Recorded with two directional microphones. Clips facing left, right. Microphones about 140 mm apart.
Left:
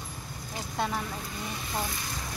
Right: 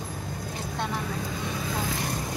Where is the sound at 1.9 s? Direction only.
75° right (ahead or behind).